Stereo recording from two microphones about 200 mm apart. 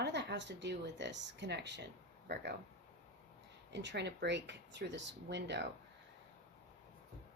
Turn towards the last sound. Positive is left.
turn(degrees=-60)  # may be behind; listen again after turning